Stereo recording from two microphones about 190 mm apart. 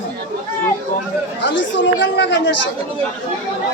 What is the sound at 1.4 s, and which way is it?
Speech, 75° left (ahead or behind).